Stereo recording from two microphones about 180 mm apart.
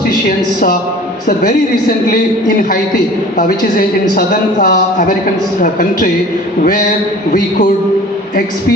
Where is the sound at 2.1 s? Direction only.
50° left (ahead or behind).